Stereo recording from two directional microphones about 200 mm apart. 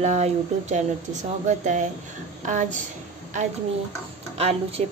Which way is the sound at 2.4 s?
40° right (ahead or behind).